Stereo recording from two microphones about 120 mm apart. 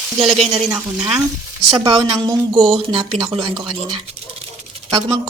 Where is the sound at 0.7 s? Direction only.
15° right (ahead or behind).